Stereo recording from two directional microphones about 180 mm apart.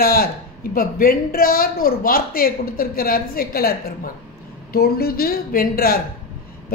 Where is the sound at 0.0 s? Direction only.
55° left (ahead or behind).